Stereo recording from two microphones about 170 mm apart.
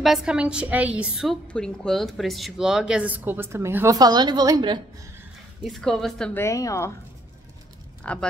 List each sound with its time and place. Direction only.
0.0 s a woman's voice: centre (ahead or behind); by 4.8 s 25° right (ahead or behind)
5.6 s a woman's voice: centre (ahead or behind)
6.4 s a woman's voice: 20° left (ahead or behind)
8.0 s speech: 5° left (ahead or behind)